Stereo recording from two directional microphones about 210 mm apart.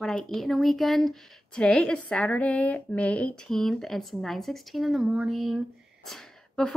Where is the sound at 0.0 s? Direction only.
Centre (ahead or behind).